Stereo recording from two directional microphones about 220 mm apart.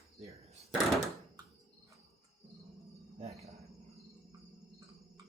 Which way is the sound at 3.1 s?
30° right (ahead or behind).